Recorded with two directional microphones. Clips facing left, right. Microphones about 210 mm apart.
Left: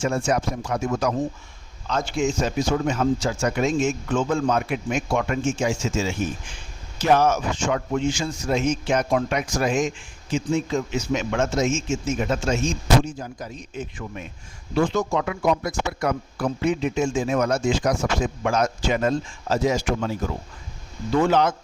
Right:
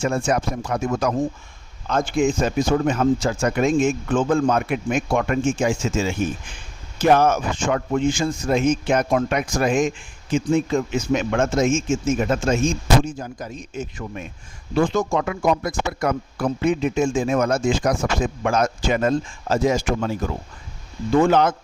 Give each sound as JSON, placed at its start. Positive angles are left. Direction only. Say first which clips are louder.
{"t": 0.0, "sound": "a man's voice", "louder": "right 1 dB", "side_deg": -55}
{"t": 21.1, "sound": "a man's voice", "louder": "right 3 dB", "side_deg": -50}